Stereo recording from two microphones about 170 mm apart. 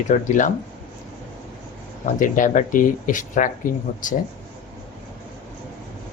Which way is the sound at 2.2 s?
50° left (ahead or behind).